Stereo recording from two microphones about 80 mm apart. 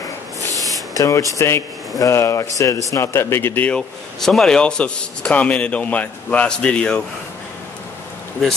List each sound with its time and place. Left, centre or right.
0.9 s a man's voice: left
3.7 s a man's voice: centre